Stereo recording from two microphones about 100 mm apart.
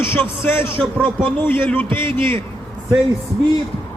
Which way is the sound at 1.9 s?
60° right (ahead or behind).